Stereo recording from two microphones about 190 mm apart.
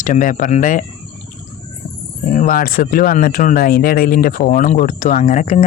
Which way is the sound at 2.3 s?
45° left (ahead or behind).